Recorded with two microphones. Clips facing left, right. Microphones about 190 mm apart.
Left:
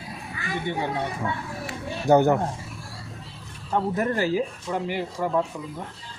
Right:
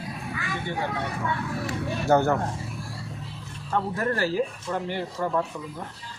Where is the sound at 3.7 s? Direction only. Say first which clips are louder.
Left 2 dB; 20° left (ahead or behind).